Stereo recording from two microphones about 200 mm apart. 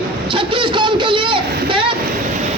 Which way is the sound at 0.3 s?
25° right (ahead or behind).